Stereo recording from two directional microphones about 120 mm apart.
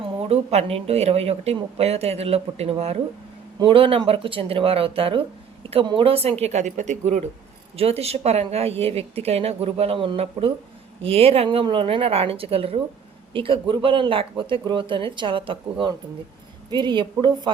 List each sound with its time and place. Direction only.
0.0 s speech: 55° right (ahead or behind)
3.6 s speech: 50° right (ahead or behind); by 7.3 s 75° right (ahead or behind)
7.8 s a woman's voice: 55° right (ahead or behind); by 17.5 s 40° right (ahead or behind)